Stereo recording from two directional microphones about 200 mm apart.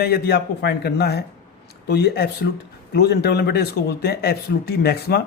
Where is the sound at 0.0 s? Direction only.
50° left (ahead or behind).